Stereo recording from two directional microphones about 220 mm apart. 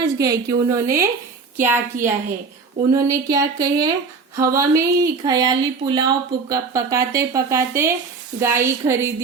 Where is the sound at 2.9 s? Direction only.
15° right (ahead or behind).